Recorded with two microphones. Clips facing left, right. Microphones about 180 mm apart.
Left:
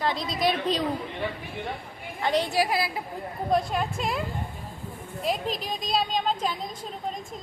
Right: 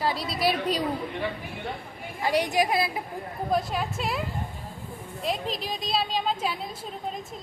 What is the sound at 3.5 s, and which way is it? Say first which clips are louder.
A woman's voice: left 2 dB; centre (ahead or behind).